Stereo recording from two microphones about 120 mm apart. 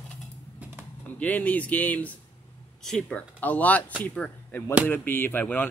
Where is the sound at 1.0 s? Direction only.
15° left (ahead or behind).